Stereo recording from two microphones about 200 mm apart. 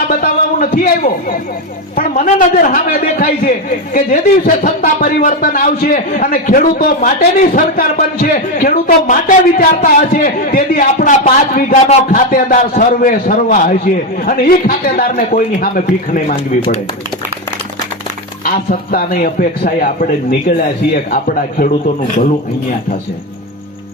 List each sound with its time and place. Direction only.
0.1 s a man's voice: 45° left (ahead or behind)
16.3 s speech: 25° left (ahead or behind)
18.4 s speech: 45° left (ahead or behind)
21.1 s speech: 45° left (ahead or behind)